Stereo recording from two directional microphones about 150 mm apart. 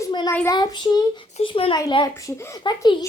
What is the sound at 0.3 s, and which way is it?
A child's voice, 20° left (ahead or behind).